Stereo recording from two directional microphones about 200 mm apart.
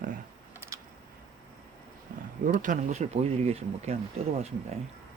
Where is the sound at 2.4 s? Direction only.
40° right (ahead or behind).